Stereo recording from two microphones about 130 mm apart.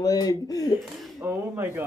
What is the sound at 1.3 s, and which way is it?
Speech, 15° right (ahead or behind).